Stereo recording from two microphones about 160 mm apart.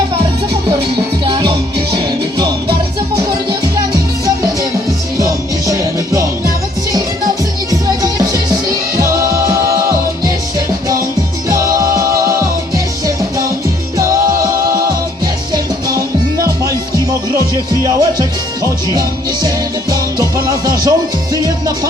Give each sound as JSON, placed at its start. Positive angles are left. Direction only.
{"t": 1.2, "sound": "music", "side_deg": -30}
{"t": 5.1, "sound": "music", "side_deg": -20}
{"t": 7.7, "sound": "music", "side_deg": -20}
{"t": 11.4, "sound": "music", "side_deg": -20}
{"t": 17.8, "sound": "music", "side_deg": -20}